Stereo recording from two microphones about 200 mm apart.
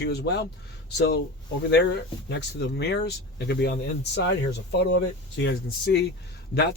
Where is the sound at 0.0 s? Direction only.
55° left (ahead or behind).